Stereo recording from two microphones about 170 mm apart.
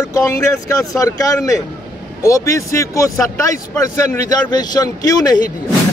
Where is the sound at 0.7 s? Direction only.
20° left (ahead or behind).